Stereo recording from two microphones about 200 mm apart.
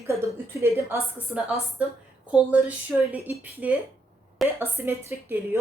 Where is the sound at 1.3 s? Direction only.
5° right (ahead or behind).